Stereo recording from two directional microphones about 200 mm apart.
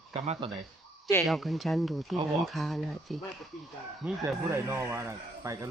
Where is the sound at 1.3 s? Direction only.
Centre (ahead or behind).